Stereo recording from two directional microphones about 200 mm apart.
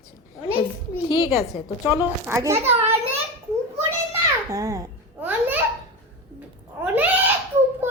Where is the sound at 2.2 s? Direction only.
15° right (ahead or behind).